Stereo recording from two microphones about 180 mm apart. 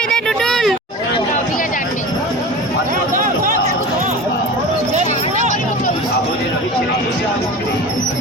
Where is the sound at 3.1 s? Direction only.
50° right (ahead or behind).